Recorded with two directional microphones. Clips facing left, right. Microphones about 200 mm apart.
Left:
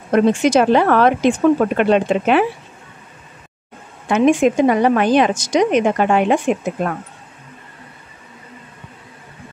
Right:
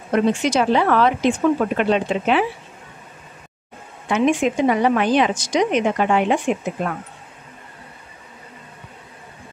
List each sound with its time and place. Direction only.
0.1 s speech: 50° left (ahead or behind)
4.1 s speech: 45° left (ahead or behind)